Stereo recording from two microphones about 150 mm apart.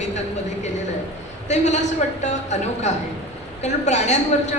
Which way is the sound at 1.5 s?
50° left (ahead or behind).